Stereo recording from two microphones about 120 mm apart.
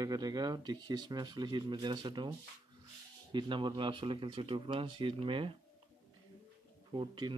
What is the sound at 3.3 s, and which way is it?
Speech, 40° right (ahead or behind).